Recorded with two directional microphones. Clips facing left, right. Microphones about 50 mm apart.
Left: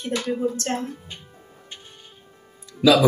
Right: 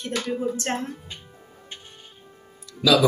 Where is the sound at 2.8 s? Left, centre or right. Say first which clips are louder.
Left 2 dB; left.